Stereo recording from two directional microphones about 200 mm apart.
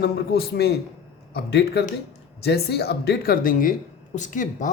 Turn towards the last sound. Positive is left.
turn(degrees=40)  # may be behind; listen again after turning